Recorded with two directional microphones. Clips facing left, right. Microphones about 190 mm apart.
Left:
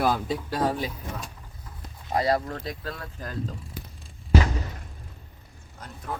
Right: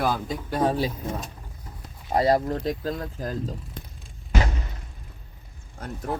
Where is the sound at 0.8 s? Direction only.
30° right (ahead or behind).